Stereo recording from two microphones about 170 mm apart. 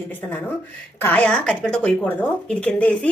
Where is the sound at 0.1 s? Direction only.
10° left (ahead or behind).